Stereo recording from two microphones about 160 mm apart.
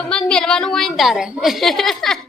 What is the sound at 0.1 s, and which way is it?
A woman's voice, 5° left (ahead or behind).